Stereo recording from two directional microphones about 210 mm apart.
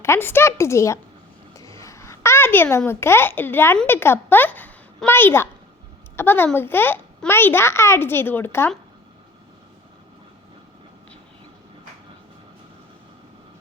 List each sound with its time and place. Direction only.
0.0 s a child's voice: 10° left (ahead or behind)